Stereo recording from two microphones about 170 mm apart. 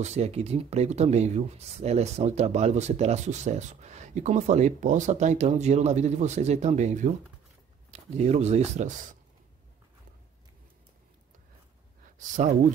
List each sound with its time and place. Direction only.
0.0 s speech: 40° right (ahead or behind)